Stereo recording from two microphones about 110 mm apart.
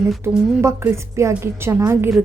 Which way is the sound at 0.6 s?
25° right (ahead or behind).